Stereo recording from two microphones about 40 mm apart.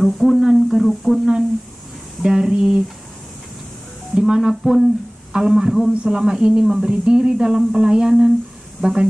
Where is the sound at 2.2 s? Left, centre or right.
Centre.